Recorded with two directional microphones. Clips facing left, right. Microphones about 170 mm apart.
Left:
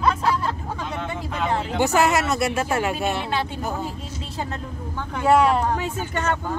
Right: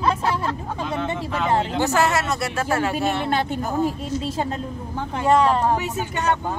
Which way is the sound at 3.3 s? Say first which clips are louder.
Right 3 dB; 45° right (ahead or behind).